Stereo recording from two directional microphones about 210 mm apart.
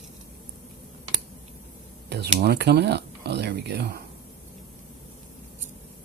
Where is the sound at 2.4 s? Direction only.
50° right (ahead or behind).